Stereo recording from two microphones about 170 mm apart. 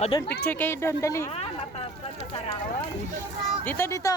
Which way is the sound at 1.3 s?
40° left (ahead or behind).